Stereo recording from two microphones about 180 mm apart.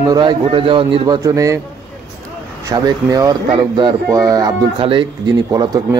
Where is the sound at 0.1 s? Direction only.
25° right (ahead or behind).